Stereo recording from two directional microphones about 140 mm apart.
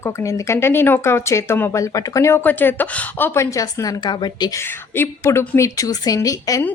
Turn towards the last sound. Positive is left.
turn(degrees=25)  # may be behind; listen again after turning